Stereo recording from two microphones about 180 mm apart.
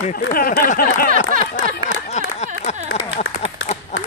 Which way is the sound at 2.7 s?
40° left (ahead or behind).